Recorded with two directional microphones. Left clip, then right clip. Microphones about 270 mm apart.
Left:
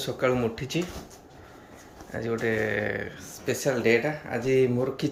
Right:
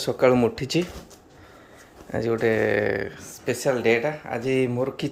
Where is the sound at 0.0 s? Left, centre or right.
Centre.